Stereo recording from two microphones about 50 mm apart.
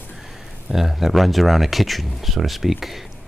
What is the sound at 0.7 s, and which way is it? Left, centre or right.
Speech, centre.